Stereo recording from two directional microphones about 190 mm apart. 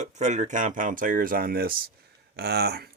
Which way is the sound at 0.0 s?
40° right (ahead or behind).